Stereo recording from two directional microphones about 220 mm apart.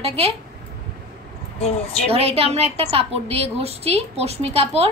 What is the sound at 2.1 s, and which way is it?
A woman's voice, 25° right (ahead or behind).